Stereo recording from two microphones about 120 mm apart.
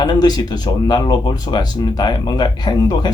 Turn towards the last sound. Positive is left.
turn(degrees=35)  # may be behind; listen again after turning